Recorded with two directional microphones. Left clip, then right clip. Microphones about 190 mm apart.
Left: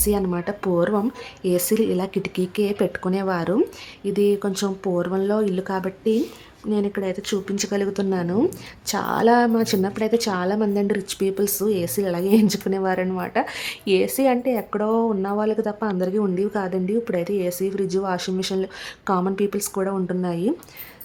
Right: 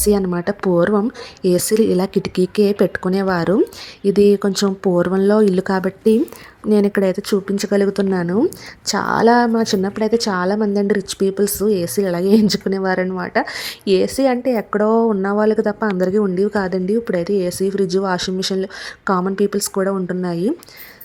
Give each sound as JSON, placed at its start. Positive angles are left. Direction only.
{"t": 0.0, "sound": "a woman's voice", "side_deg": -25}